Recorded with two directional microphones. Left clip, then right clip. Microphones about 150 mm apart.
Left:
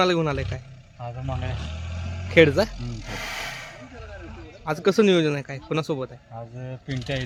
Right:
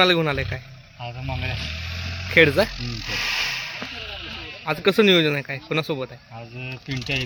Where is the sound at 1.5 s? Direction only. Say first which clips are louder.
Right 8 dB; 75° left (ahead or behind); by 2.3 s 90° left.